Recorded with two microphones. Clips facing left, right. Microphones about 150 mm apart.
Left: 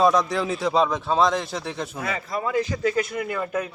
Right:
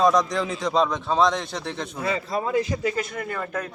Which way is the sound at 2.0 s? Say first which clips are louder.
Right 5 dB; 30° right (ahead or behind).